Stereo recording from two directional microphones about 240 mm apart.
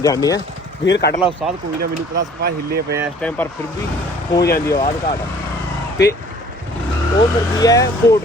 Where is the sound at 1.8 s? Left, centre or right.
Right.